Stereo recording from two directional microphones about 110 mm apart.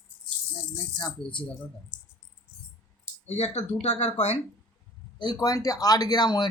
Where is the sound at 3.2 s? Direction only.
80° left.